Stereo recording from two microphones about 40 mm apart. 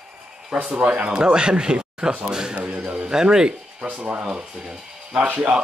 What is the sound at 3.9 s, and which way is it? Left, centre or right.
Speech, right.